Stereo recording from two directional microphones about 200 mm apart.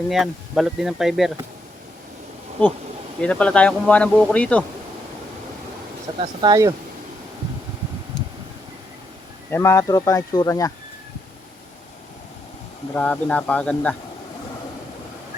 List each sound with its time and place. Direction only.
0.1 s speech: centre (ahead or behind)
3.2 s speech: 5° left (ahead or behind)
6.1 s speech: 25° right (ahead or behind)
9.5 s speech: 15° left (ahead or behind)
12.9 s speech: 5° left (ahead or behind)